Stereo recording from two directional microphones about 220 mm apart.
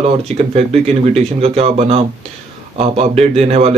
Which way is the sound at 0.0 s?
30° right (ahead or behind).